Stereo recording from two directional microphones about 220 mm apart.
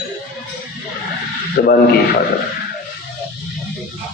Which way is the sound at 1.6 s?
45° left (ahead or behind).